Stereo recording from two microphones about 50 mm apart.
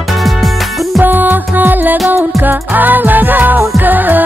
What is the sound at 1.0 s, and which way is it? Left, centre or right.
Music, right.